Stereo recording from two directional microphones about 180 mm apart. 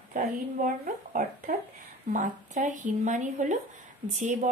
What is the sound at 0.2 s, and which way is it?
Speech, 45° right (ahead or behind).